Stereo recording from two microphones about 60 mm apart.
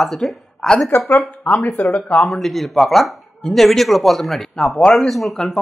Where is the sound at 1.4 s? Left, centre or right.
Left.